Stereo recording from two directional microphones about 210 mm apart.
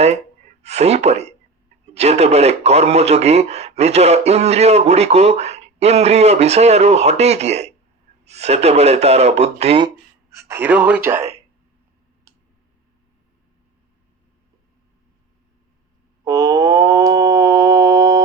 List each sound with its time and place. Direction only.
0.0 s speech: 30° right (ahead or behind)
9.9 s speech: 10° right (ahead or behind)
16.2 s mantra: 15° right (ahead or behind)